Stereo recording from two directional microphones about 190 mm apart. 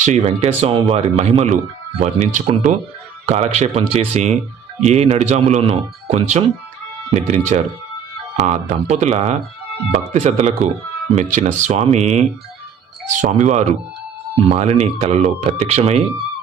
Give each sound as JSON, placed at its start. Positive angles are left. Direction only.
{"t": 0.0, "sound": "speech", "side_deg": -35}